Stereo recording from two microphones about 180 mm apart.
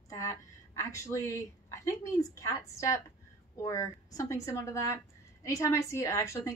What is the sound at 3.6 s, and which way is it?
A woman's voice, 15° left (ahead or behind).